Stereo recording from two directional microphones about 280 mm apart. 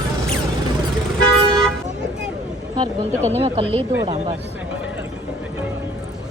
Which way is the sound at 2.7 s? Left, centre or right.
Centre.